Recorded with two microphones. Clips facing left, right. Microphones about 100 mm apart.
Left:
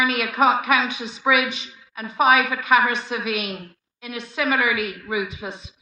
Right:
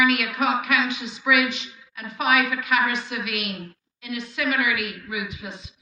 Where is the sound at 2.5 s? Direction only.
20° left (ahead or behind).